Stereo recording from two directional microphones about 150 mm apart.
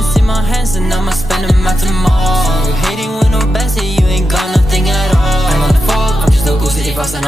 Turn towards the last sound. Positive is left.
turn(degrees=0)  # may be behind; listen again after turning